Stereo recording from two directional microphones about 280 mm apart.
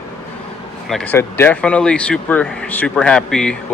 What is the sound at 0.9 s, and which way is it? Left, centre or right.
Speech, centre.